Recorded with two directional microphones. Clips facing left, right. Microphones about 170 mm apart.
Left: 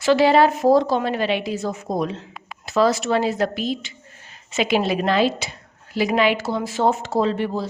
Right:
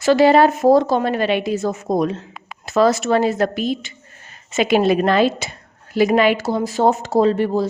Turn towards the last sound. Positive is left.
turn(degrees=-45)  # may be behind; listen again after turning